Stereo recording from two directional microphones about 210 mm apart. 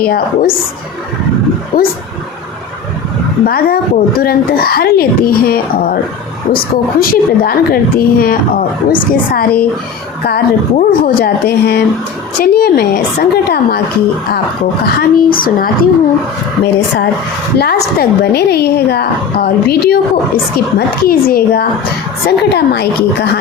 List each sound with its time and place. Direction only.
0.0 s a woman's voice: 45° left (ahead or behind)
1.7 s a woman's voice: 45° left (ahead or behind)
3.4 s a woman's voice: 45° left (ahead or behind)
14.8 s a woman's voice: 45° left (ahead or behind)
17.6 s a woman's voice: 50° left (ahead or behind)